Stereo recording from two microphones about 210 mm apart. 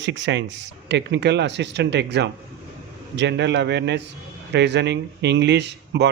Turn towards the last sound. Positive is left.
turn(degrees=-55)  # may be behind; listen again after turning